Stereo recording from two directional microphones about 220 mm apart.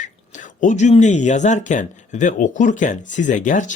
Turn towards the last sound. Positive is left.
turn(degrees=35)  # may be behind; listen again after turning